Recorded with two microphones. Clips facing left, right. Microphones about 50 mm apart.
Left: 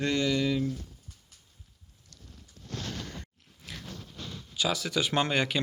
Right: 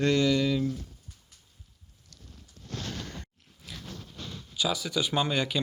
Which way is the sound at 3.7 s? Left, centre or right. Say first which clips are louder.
Left 1 dB; left.